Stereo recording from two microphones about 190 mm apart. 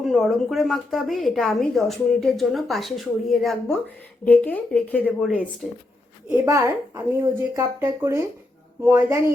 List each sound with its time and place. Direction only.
0.0 s a woman's voice: centre (ahead or behind)
6.3 s speech: 15° right (ahead or behind)